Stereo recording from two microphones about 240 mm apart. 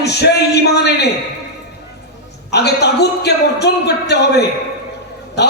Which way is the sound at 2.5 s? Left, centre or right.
Left.